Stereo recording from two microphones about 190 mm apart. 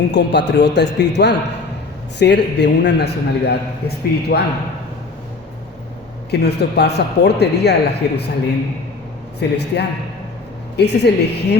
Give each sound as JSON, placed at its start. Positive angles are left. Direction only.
{"t": 0.1, "sound": "a man's voice", "side_deg": 65}
{"t": 6.3, "sound": "a man's voice", "side_deg": 60}
{"t": 9.4, "sound": "a man's voice", "side_deg": 60}